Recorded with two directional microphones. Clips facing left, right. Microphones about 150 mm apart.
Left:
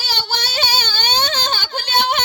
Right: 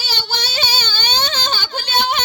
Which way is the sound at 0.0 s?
45° left (ahead or behind).